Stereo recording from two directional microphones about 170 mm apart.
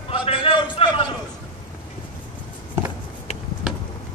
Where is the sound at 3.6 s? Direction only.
Centre (ahead or behind).